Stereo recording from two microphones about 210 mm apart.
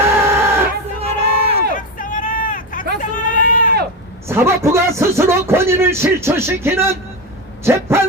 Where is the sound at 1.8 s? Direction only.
40° left (ahead or behind).